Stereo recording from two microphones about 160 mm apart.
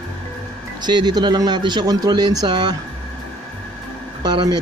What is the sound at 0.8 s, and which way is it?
Speech, 25° right (ahead or behind).